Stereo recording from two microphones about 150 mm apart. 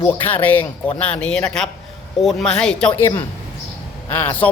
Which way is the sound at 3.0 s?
25° left (ahead or behind).